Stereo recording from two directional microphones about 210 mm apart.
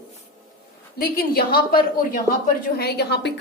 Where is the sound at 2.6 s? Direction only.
50° left (ahead or behind).